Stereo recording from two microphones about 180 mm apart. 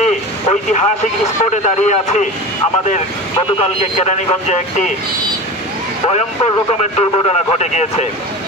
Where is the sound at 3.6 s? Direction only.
40° left (ahead or behind).